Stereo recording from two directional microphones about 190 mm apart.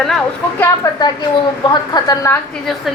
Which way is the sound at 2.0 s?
15° left (ahead or behind).